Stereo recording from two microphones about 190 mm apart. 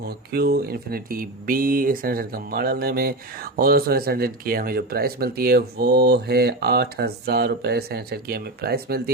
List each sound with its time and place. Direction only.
0.0 s speech: 55° right (ahead or behind)